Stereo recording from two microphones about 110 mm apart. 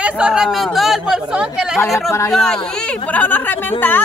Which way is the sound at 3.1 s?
15° left (ahead or behind).